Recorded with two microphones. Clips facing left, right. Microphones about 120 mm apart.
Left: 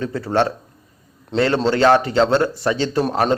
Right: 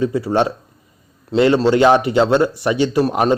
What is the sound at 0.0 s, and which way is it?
A man's voice, 10° right (ahead or behind).